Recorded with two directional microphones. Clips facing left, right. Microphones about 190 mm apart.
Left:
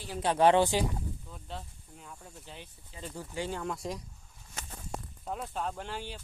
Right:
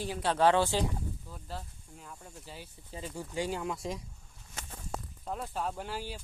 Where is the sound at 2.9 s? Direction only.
40° right (ahead or behind).